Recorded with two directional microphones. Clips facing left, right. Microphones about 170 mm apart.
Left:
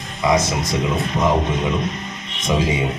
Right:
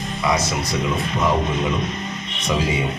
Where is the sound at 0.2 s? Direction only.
20° left (ahead or behind).